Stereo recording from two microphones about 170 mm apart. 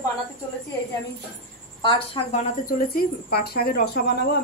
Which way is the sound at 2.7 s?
55° left (ahead or behind).